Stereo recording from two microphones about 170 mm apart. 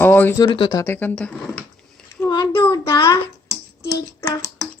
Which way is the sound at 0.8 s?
10° left (ahead or behind).